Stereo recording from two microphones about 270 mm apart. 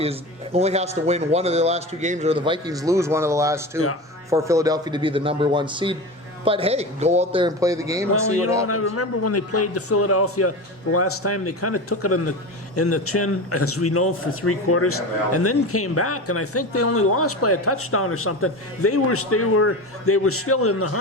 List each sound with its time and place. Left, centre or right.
0.0 s a man's voice: right
8.6 s a man's voice: left